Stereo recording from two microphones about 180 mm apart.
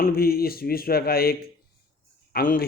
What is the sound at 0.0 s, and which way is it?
Speech, 55° left (ahead or behind).